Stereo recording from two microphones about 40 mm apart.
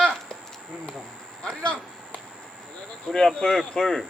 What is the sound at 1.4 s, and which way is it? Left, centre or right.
Speech, left.